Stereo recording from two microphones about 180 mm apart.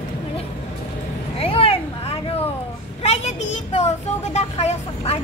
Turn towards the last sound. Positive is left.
turn(degrees=35)  # may be behind; listen again after turning